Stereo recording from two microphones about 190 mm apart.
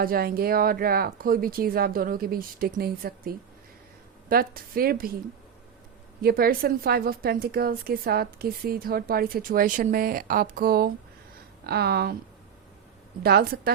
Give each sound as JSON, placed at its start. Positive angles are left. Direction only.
{"t": 0.0, "sound": "a woman's voice", "side_deg": -50}
{"t": 6.2, "sound": "a woman's voice", "side_deg": -50}
{"t": 13.2, "sound": "a woman's voice", "side_deg": -55}